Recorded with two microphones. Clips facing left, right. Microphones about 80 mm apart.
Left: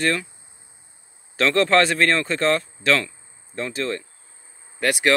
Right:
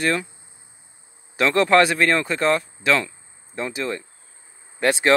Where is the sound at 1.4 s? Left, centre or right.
Centre.